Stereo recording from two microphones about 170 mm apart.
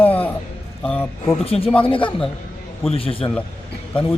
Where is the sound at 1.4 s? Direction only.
35° left (ahead or behind).